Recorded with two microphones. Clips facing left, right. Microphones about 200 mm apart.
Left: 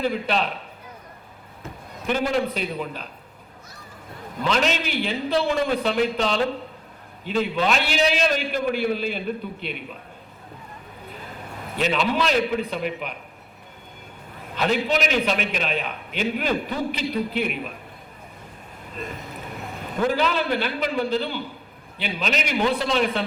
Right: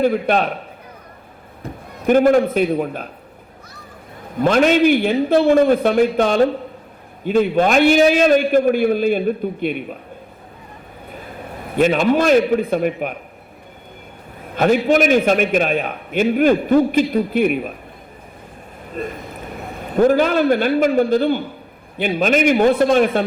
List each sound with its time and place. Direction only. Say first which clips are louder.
0.0 s a man's voice: right 7 dB; 50° right (ahead or behind)
1.6 s a man's voice: right 9 dB; 50° right (ahead or behind)
4.4 s a man's voice: right 10 dB; 50° right (ahead or behind)
11.8 s a man's voice: right 8 dB; 50° right (ahead or behind)
14.5 s a man's voice: right 8 dB; 50° right (ahead or behind)
20.0 s a man's voice: right 9 dB; 50° right (ahead or behind)